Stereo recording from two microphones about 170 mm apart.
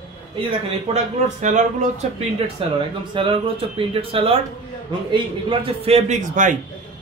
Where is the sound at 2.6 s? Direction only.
35° right (ahead or behind).